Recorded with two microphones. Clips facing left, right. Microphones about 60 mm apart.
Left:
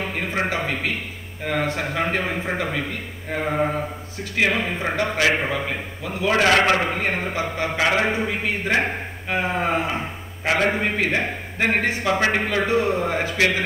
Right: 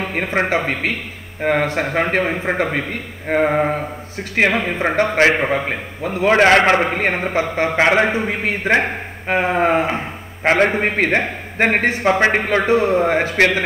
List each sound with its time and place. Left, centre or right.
0.1 s a man's voice: right